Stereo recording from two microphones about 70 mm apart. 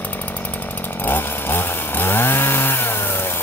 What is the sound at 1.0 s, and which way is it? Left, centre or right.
Chainsaw, left.